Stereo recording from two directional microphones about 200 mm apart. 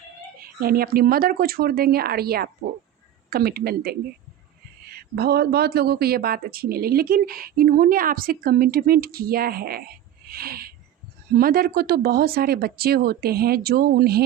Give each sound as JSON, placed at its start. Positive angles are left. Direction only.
{"t": 0.6, "sound": "speech", "side_deg": -50}
{"t": 5.1, "sound": "speech", "side_deg": -50}